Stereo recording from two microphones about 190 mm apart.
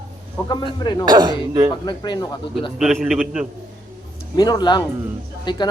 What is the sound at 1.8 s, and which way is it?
Speech, 25° left (ahead or behind).